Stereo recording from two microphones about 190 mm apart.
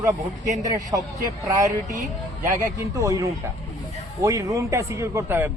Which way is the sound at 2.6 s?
15° right (ahead or behind).